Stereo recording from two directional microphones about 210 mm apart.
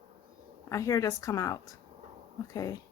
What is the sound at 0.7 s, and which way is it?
Speech, 15° left (ahead or behind).